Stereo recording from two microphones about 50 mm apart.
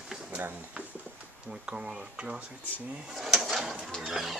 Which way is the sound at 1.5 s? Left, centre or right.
Right.